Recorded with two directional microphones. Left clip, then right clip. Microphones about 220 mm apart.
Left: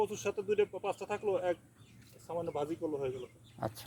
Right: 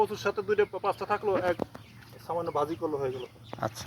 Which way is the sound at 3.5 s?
10° left (ahead or behind).